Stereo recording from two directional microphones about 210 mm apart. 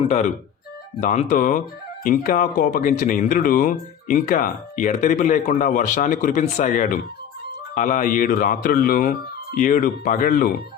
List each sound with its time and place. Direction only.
0.0 s speech: 35° left (ahead or behind)